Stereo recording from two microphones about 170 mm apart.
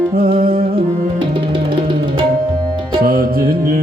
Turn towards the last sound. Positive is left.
turn(degrees=-60)  # may be behind; listen again after turning